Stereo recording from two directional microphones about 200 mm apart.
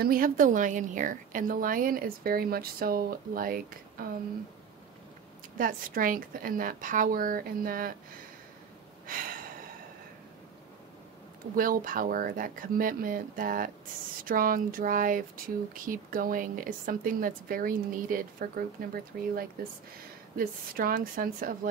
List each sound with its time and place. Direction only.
0.0 s speech: 45° right (ahead or behind)
5.6 s speech: 45° right (ahead or behind)
9.0 s a sound: 45° right (ahead or behind)
11.5 s speech: 45° right (ahead or behind)
20.3 s speech: 45° right (ahead or behind)